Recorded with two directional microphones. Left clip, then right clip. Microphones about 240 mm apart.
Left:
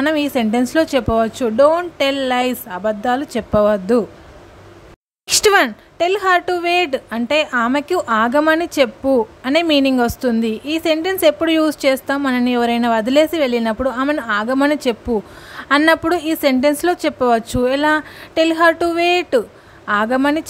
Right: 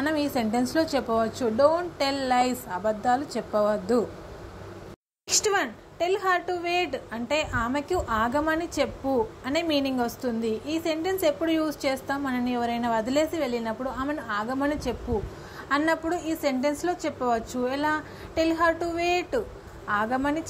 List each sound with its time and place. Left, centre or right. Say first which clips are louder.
0.0 s a woman's voice: left 9 dB; left
5.4 s a woman's voice: left 14 dB; left